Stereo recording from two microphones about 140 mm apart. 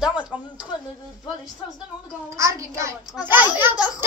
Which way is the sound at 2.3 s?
25° right (ahead or behind).